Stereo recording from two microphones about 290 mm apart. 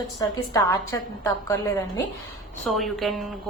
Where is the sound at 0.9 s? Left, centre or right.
Centre.